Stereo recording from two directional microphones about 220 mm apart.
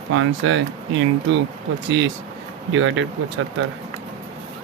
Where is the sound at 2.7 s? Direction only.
60° right (ahead or behind).